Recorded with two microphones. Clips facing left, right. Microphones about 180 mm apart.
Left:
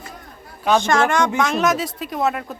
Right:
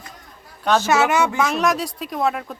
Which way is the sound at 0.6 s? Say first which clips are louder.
Left 1 dB; centre (ahead or behind).